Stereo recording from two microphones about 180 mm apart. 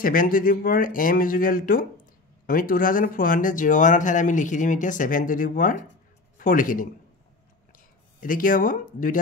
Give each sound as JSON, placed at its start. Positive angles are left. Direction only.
{"t": 0.0, "sound": "a man's voice", "side_deg": 50}
{"t": 8.2, "sound": "speech", "side_deg": 50}